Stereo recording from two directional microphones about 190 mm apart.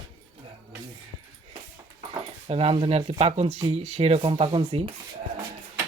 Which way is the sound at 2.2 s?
30° right (ahead or behind).